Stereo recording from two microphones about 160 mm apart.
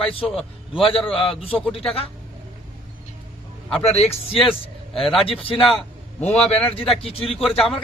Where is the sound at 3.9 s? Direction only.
40° left (ahead or behind).